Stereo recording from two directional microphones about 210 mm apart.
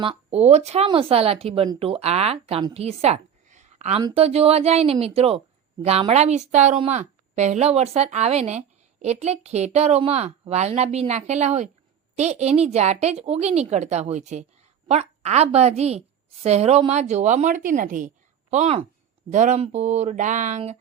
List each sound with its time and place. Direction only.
0.0 s a woman's voice: 25° right (ahead or behind)